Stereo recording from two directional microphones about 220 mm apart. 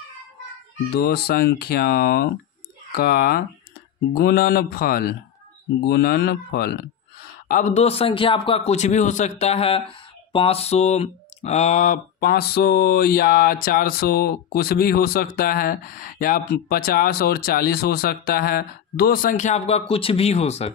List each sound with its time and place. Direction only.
1.0 s speech: 45° left (ahead or behind)
7.4 s a man's voice: 35° left (ahead or behind)